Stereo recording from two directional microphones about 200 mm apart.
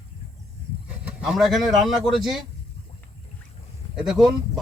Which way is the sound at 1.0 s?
Centre (ahead or behind).